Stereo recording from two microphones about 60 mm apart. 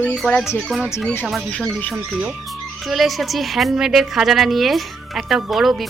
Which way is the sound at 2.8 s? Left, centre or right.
Centre.